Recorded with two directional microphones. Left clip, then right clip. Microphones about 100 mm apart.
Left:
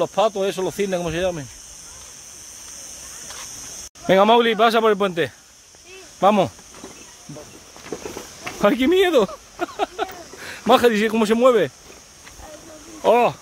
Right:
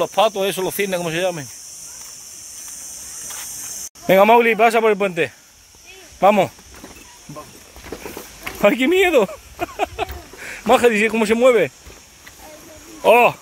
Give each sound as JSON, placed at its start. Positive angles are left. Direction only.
{"t": 0.0, "sound": "speech", "side_deg": -15}
{"t": 4.1, "sound": "a man's voice", "side_deg": 0}
{"t": 4.9, "sound": "speech", "side_deg": 15}
{"t": 8.5, "sound": "a sound", "side_deg": 0}
{"t": 10.7, "sound": "speech", "side_deg": 10}
{"t": 13.0, "sound": "a man's voice", "side_deg": 5}